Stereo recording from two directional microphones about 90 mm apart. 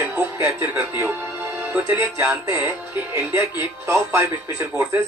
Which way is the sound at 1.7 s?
25° right (ahead or behind).